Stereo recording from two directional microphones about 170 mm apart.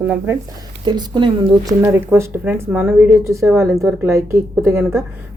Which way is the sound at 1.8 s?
15° right (ahead or behind).